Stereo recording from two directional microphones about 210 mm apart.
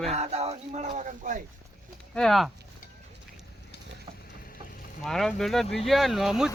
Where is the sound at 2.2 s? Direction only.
Centre (ahead or behind).